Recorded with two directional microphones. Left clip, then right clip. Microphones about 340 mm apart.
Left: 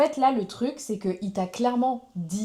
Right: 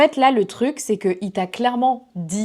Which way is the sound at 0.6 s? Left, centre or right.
Right.